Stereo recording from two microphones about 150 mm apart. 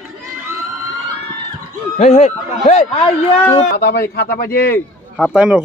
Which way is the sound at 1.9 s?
50° left (ahead or behind).